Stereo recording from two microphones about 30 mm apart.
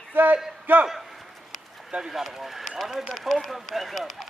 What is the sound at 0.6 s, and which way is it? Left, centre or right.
Speech, right.